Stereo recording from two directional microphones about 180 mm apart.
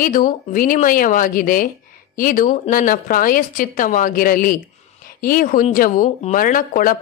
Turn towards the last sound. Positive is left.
turn(degrees=50)  # may be behind; listen again after turning